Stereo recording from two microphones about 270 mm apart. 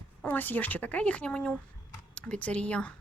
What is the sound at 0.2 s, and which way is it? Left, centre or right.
Speech, centre.